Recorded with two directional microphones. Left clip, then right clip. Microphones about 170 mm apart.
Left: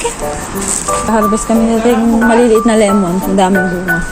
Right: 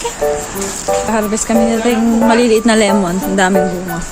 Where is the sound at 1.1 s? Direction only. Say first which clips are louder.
Left 3 dB; 25° right (ahead or behind).